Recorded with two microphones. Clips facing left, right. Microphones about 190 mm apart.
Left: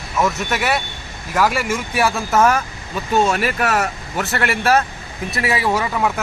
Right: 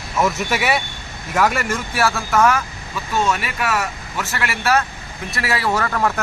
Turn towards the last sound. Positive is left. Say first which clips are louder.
# left 1 dB
turn(degrees=10)  # may be behind; listen again after turning